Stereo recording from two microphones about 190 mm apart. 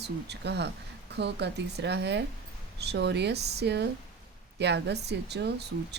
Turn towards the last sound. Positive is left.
turn(degrees=-60)  # may be behind; listen again after turning